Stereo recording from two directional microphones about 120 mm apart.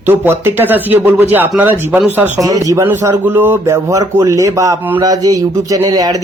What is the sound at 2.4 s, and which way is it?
Speech, 30° right (ahead or behind).